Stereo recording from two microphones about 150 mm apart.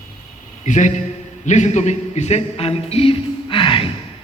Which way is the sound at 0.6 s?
55° left (ahead or behind).